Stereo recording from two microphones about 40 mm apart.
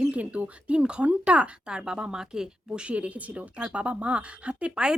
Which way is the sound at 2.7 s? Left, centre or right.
Right.